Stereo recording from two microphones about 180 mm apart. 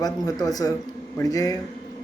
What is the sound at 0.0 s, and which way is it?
A man's voice, 20° left (ahead or behind).